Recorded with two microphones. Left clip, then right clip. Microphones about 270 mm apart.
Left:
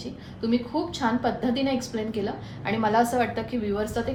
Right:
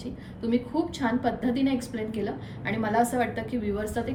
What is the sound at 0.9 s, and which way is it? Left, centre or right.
A woman's voice, centre.